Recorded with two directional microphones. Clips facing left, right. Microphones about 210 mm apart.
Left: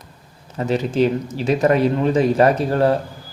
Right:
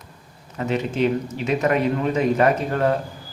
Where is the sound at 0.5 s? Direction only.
35° left (ahead or behind).